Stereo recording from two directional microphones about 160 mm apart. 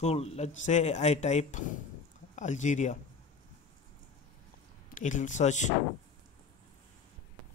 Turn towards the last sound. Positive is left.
turn(degrees=50)  # may be behind; listen again after turning